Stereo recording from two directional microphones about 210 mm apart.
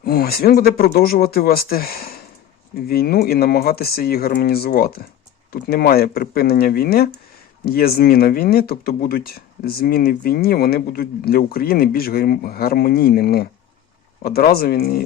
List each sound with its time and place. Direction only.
0.0 s speech: 45° left (ahead or behind)